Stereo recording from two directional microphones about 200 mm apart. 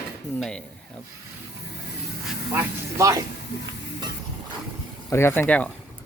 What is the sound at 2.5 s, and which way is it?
Speech, 15° right (ahead or behind).